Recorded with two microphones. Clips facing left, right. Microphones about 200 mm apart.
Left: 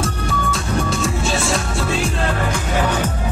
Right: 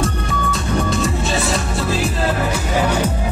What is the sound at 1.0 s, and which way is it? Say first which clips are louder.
Music: right 1 dB; centre (ahead or behind).